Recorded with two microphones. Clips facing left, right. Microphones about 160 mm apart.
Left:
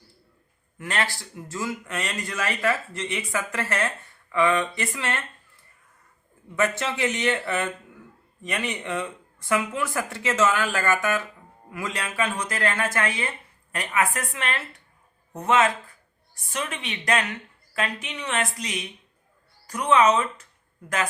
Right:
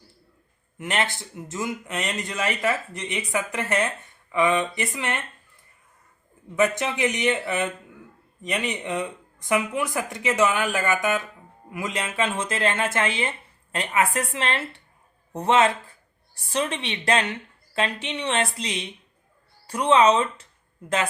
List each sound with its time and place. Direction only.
0.8 s speech: 20° right (ahead or behind)
6.6 s speech: 15° right (ahead or behind)